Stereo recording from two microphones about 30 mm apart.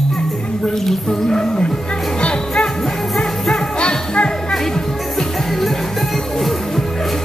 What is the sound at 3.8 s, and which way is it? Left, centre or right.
Music, left.